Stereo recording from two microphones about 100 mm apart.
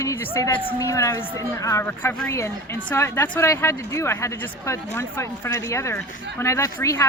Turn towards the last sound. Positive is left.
turn(degrees=30)  # may be behind; listen again after turning